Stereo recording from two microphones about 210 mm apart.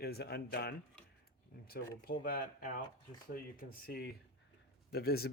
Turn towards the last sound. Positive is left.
turn(degrees=50)  # may be behind; listen again after turning